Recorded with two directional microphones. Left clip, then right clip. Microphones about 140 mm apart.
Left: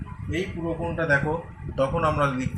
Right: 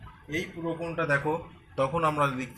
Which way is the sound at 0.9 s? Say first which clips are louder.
Left 4 dB; 45° right (ahead or behind).